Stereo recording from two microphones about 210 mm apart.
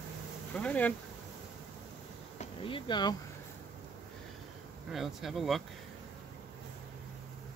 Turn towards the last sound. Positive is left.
turn(degrees=0)  # may be behind; listen again after turning